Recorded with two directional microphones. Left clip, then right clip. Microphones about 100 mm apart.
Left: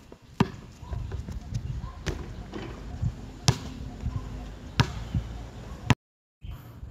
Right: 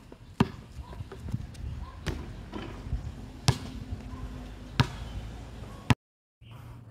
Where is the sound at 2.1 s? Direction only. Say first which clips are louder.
Left 2 dB; 5° right (ahead or behind).